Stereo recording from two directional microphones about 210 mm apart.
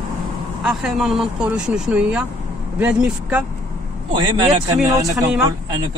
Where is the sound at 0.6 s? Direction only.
5° right (ahead or behind).